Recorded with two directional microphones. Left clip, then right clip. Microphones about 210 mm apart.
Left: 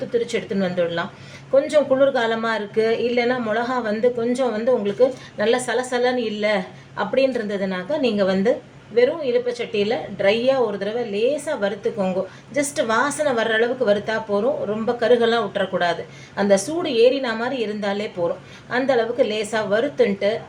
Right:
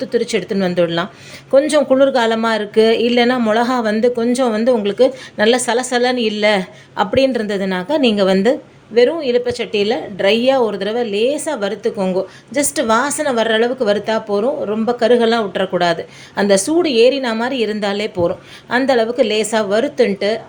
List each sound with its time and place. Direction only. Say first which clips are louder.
0.1 s a woman's voice: right 5 dB; 40° right (ahead or behind)